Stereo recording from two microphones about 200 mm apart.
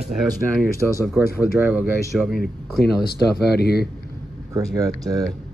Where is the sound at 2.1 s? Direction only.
Centre (ahead or behind).